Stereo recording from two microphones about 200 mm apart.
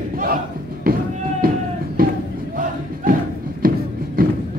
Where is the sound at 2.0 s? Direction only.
45° right (ahead or behind).